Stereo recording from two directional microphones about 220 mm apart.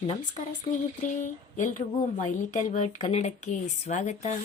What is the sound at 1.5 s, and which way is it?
Speech, 35° left (ahead or behind).